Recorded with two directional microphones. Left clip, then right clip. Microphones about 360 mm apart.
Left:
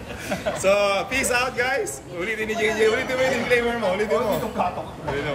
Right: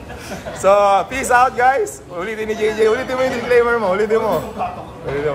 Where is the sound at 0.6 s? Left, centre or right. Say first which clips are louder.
Right 8 dB; centre.